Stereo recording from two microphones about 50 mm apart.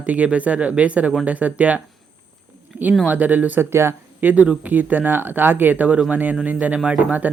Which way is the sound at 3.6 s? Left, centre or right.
Right.